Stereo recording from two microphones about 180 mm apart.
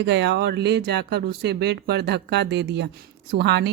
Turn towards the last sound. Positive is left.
turn(degrees=-65)  # may be behind; listen again after turning